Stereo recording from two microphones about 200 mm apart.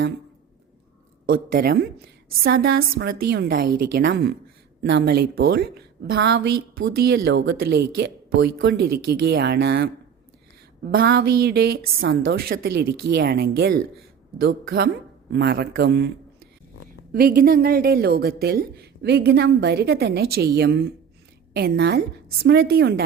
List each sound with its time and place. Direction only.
1.3 s a woman's voice: 50° right (ahead or behind)
10.9 s a woman's voice: 50° right (ahead or behind)
15.3 s a woman's voice: 50° right (ahead or behind)